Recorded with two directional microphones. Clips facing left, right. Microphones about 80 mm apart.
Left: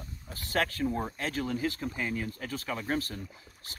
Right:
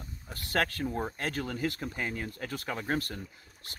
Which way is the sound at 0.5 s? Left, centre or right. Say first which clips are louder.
Left 1 dB; right.